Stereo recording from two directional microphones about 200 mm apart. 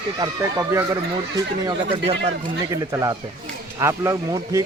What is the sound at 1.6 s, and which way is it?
Speech, 30° right (ahead or behind).